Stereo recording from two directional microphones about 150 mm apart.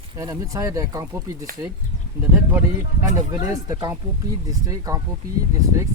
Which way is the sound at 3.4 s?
25° right (ahead or behind).